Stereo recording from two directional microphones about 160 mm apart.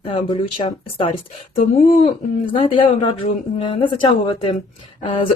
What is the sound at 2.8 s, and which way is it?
A woman's voice, 30° left (ahead or behind).